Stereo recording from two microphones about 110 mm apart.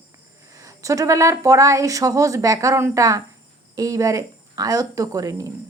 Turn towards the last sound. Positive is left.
turn(degrees=-30)  # may be behind; listen again after turning